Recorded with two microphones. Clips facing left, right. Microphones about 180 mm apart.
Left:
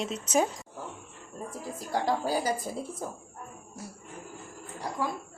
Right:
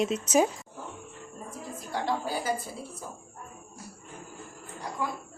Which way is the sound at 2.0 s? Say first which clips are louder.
Left 2 dB; 40° left (ahead or behind).